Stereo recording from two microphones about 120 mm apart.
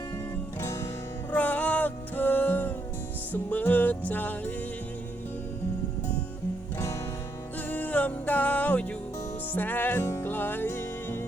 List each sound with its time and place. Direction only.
0.6 s music: 25° left (ahead or behind)
1.3 s music: 15° left (ahead or behind)
7.7 s music: 15° left (ahead or behind)